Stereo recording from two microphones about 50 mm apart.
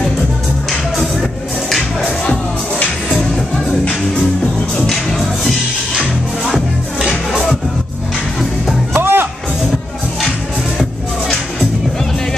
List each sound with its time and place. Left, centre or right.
3.1 s music: centre
4.7 s music: centre
6.5 s music: centre
8.9 s music: right